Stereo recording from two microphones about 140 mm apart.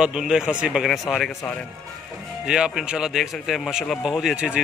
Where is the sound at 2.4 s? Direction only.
5° right (ahead or behind).